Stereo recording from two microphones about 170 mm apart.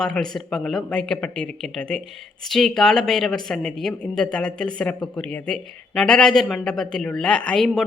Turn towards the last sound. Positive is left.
turn(degrees=5)  # may be behind; listen again after turning